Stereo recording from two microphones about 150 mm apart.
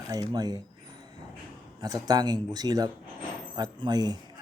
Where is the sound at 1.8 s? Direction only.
25° right (ahead or behind).